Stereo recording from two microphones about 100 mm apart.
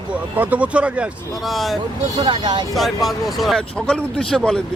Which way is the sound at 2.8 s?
Centre (ahead or behind).